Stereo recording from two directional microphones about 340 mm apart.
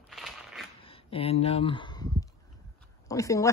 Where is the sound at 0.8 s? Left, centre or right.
Centre.